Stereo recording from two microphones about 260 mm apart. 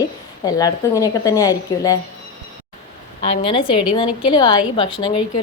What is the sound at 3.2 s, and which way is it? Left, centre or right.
A woman's voice, centre.